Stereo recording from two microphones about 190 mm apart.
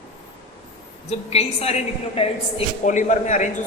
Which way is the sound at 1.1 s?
35° left (ahead or behind).